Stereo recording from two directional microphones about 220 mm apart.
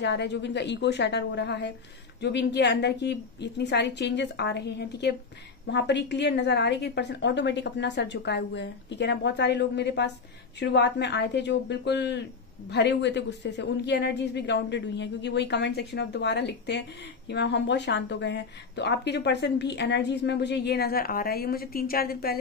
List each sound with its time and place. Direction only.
0.0 s speech: 50° left (ahead or behind)